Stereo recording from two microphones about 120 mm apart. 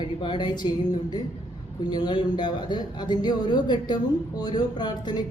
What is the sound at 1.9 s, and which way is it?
Speech, 35° left (ahead or behind).